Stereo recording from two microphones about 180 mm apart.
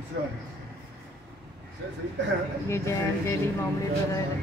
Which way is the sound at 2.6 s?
15° left (ahead or behind).